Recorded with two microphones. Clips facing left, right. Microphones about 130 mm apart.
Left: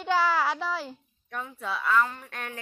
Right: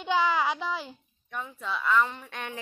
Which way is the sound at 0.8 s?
Centre (ahead or behind).